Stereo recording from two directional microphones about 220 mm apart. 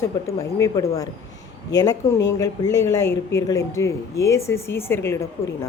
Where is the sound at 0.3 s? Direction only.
15° left (ahead or behind).